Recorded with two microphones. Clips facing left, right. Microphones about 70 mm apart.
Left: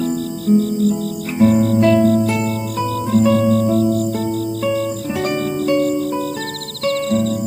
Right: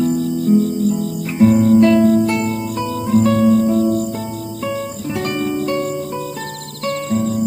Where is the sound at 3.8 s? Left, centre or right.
Centre.